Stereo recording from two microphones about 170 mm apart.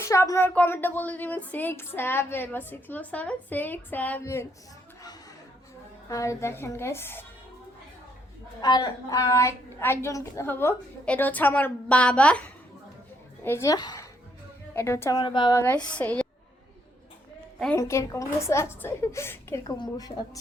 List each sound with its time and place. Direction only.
0.0 s speech: 15° left (ahead or behind)
6.1 s speech: 20° left (ahead or behind)
8.6 s speech: 25° left (ahead or behind); by 12.4 s 5° left (ahead or behind)
13.4 s a woman's voice: 15° left (ahead or behind)
15.2 s a woman's voice: 25° left (ahead or behind)
15.6 s speech: 10° left (ahead or behind)
17.7 s speech: 15° left (ahead or behind)